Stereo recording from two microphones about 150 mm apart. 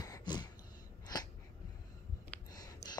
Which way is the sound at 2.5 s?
25° left (ahead or behind).